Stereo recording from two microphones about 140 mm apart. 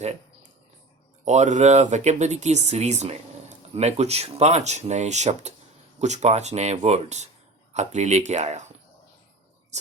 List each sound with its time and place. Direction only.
1.2 s speech: 55° right (ahead or behind)